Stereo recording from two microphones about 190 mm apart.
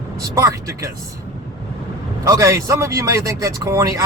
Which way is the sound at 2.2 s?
15° right (ahead or behind).